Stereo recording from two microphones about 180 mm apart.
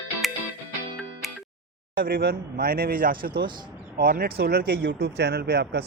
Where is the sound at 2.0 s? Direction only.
55° right (ahead or behind).